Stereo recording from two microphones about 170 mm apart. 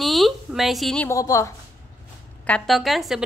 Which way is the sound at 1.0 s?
20° left (ahead or behind).